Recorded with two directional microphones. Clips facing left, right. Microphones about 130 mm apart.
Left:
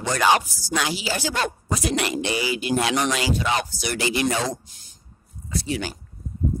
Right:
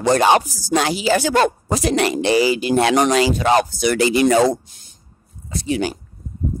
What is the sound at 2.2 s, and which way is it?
Speech, 35° right (ahead or behind).